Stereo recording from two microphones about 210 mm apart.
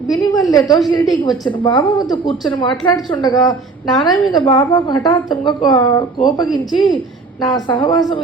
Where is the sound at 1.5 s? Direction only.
25° left (ahead or behind).